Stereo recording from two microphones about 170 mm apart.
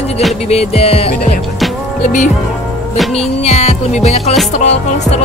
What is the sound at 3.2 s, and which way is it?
Music, 40° left (ahead or behind).